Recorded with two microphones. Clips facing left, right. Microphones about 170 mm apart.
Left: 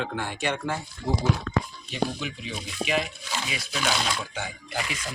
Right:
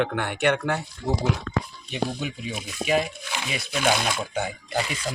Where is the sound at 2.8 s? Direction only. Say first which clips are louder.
Right 4 dB; 45° right (ahead or behind).